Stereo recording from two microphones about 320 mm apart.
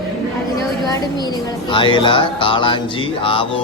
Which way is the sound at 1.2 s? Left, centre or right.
Centre.